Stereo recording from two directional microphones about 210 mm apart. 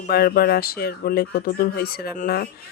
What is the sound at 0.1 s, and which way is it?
Speech, 50° left (ahead or behind).